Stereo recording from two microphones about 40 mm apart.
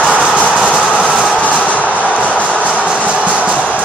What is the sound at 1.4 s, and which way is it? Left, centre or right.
Train, left.